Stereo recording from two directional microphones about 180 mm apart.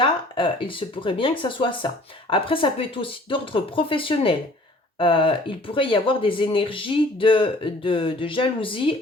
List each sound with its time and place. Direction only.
0.0 s speech: 30° left (ahead or behind)